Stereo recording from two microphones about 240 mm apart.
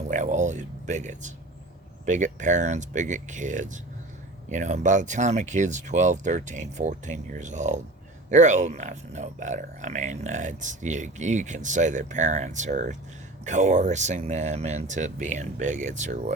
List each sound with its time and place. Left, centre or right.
0.1 s speech: right